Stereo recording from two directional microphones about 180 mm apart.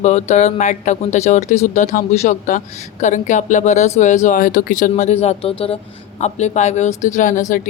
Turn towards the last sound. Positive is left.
turn(degrees=45)  # may be behind; listen again after turning